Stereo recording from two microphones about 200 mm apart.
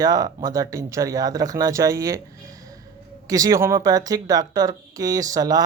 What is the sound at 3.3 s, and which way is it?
Speech, 15° right (ahead or behind).